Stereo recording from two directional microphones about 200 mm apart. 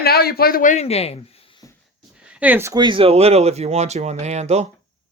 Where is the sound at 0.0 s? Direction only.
50° left (ahead or behind); by 1.2 s 30° left (ahead or behind).